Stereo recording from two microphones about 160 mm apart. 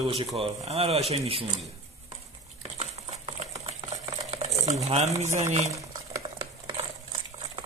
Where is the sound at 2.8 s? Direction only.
40° right (ahead or behind).